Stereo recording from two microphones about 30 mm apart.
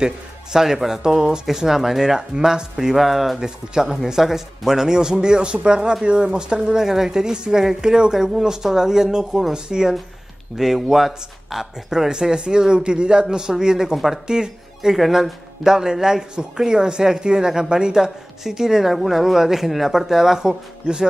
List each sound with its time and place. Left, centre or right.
0.0 s speech: centre
3.0 s speech: centre
3.3 s speech: right
3.9 s speech: centre
10.6 s speech: centre
11.9 s speech: centre
13.9 s speech: centre
14.2 s speech: right
15.0 s speech: centre
15.6 s speech: centre
18.9 s speech: centre
20.3 s speech: right